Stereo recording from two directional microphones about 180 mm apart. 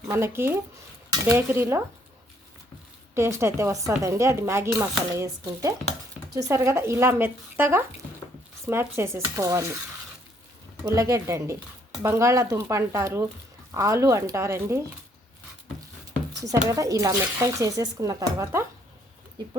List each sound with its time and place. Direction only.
0.1 s speech: 15° right (ahead or behind)
3.2 s speech: 15° right (ahead or behind)
10.9 s speech: 20° right (ahead or behind)
16.3 s a sound: 20° right (ahead or behind)
16.6 s speech: 20° right (ahead or behind)